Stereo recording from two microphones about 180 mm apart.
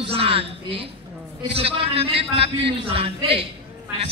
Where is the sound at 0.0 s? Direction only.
35° right (ahead or behind).